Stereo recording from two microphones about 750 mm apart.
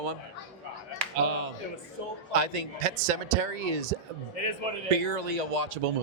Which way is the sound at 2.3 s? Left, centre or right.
Right.